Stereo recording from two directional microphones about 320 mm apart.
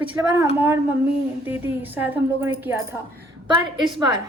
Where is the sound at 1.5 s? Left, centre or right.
Centre.